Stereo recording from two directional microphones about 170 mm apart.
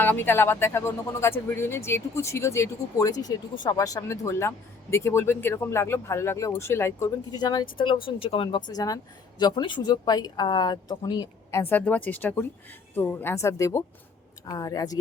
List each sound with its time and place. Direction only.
0.0 s speech: 10° left (ahead or behind)